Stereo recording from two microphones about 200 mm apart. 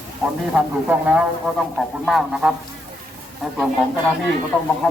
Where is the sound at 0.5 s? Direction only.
5° right (ahead or behind).